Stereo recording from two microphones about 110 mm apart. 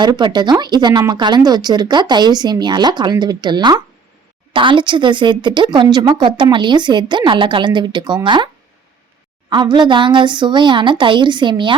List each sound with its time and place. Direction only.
0.0 s a woman's voice: 45° right (ahead or behind)
9.5 s a woman's voice: 45° right (ahead or behind)